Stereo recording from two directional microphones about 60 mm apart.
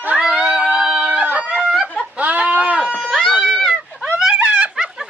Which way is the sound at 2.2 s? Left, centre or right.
Right.